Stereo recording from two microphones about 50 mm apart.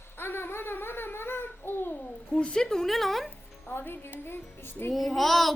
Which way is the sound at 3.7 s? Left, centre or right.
Left.